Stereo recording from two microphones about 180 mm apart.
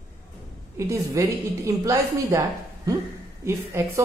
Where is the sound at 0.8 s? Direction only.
15° right (ahead or behind).